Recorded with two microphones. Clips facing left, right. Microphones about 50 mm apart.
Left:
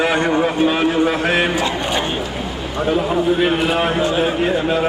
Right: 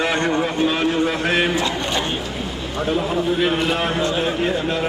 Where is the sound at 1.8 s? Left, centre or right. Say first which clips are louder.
Left 3 dB; centre.